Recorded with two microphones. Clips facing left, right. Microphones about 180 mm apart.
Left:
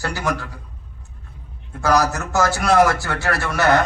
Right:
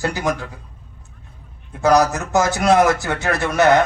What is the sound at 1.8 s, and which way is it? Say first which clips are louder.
A man's voice: right 3 dB; 20° right (ahead or behind).